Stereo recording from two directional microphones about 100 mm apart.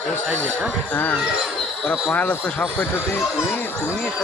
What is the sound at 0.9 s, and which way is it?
Speech, 15° left (ahead or behind).